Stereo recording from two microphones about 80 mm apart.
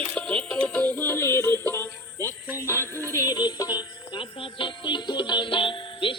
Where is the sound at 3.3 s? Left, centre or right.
Left.